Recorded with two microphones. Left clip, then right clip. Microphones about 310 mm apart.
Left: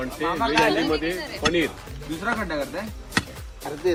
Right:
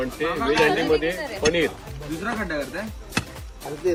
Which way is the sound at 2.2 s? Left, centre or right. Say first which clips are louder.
Left 2 dB; centre.